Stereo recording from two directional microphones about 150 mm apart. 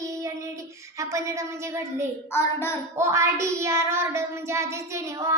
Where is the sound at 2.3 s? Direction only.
15° left (ahead or behind).